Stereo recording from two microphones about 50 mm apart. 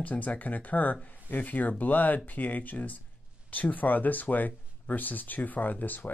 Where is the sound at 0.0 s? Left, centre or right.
Left.